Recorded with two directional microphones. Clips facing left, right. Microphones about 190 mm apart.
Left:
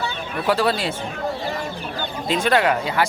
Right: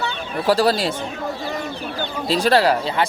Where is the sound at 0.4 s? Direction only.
40° right (ahead or behind).